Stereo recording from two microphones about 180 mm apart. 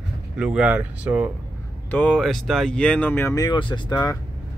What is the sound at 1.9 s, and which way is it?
Speech, 5° left (ahead or behind).